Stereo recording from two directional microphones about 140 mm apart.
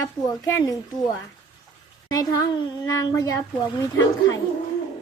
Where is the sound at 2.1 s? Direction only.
30° left (ahead or behind).